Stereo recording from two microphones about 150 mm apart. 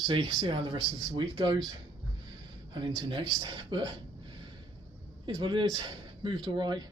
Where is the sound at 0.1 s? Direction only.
30° right (ahead or behind).